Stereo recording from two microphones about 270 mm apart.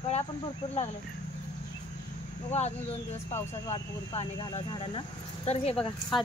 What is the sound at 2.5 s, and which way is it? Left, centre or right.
Speech, left.